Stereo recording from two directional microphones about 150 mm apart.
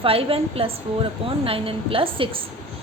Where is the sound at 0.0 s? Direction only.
40° right (ahead or behind).